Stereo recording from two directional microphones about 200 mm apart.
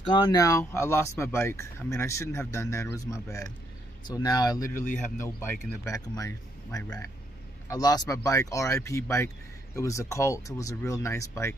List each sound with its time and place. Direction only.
0.1 s speech: 20° left (ahead or behind)
4.7 s speech: 40° left (ahead or behind)
5.4 s speech: 15° left (ahead or behind)